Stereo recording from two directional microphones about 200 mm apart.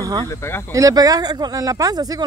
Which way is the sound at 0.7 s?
15° right (ahead or behind).